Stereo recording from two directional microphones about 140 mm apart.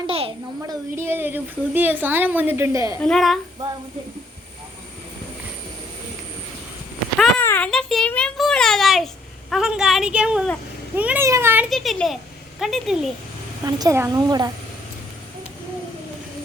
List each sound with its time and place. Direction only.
0.1 s a child's voice: 45° right (ahead or behind)
0.7 s a woman's voice: 20° right (ahead or behind)
3.0 s a woman's voice: 5° left (ahead or behind)
7.4 s a sound: 15° left (ahead or behind)
7.7 s a child's voice: 5° left (ahead or behind); by 11.7 s 15° right (ahead or behind)
11.7 s a child's voice: centre (ahead or behind)
13.7 s a woman's voice: 25° right (ahead or behind)